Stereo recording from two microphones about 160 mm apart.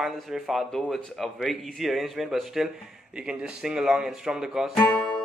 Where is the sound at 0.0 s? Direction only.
Centre (ahead or behind).